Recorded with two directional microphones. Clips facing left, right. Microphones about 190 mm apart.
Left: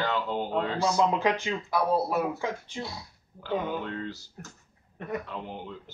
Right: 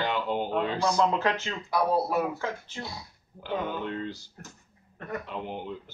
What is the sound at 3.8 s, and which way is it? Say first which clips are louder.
Speech: right 1 dB; 20° right (ahead or behind).